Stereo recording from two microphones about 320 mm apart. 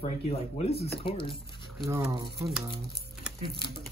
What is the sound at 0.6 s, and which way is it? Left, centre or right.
Speech, centre.